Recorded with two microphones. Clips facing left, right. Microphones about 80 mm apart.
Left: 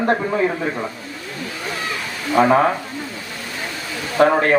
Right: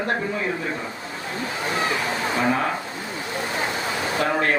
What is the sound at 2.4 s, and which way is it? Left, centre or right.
Speech, left.